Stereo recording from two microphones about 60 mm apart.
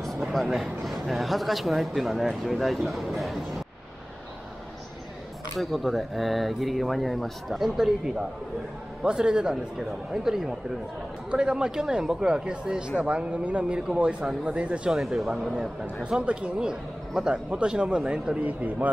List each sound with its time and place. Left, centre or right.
0.2 s speech: centre
5.6 s speech: centre
14.9 s speech: centre
15.5 s speech: centre